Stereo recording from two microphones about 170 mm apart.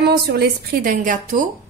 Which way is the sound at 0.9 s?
50° right (ahead or behind).